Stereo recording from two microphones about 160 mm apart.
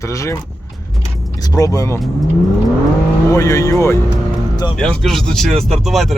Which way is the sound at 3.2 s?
20° left (ahead or behind).